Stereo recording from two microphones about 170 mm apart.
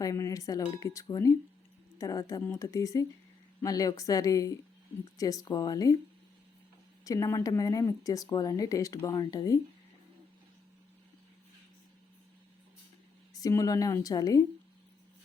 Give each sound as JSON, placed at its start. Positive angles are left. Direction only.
{"t": 0.0, "sound": "speech", "side_deg": 20}
{"t": 7.0, "sound": "speech", "side_deg": 20}
{"t": 13.3, "sound": "speech", "side_deg": 20}